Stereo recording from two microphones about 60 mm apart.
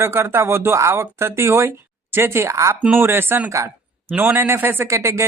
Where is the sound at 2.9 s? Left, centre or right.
Right.